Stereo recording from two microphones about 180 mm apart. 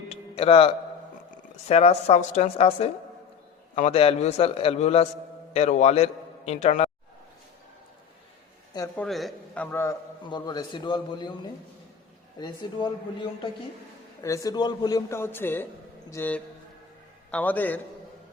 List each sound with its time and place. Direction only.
0.1 s a sound: 35° left (ahead or behind)
1.6 s a woman's voice: 35° left (ahead or behind)
9.0 s a man's voice: centre (ahead or behind)
9.6 s a man's voice: 15° left (ahead or behind)
10.2 s a man's voice: 25° left (ahead or behind)